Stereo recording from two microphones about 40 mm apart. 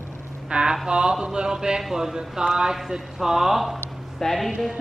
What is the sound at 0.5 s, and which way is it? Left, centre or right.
Speech, right.